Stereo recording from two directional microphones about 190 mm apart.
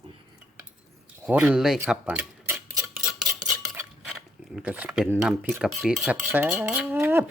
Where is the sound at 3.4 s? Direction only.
5° right (ahead or behind).